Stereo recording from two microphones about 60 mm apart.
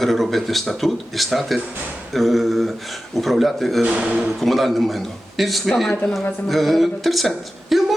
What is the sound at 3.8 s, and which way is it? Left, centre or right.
Speech, centre.